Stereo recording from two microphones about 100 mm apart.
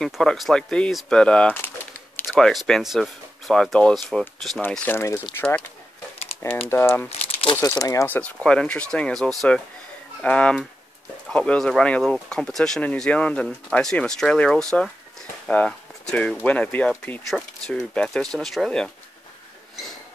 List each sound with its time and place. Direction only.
0.0 s speech: 5° left (ahead or behind)
4.6 s speech: 20° left (ahead or behind)
6.7 s speech: 20° left (ahead or behind)
7.1 s crumpling: 90° left
7.6 s speech: 35° left (ahead or behind)
8.1 s speech: 15° left (ahead or behind)
15.4 s a sound: 10° left (ahead or behind)
16.4 s speech: 15° left (ahead or behind)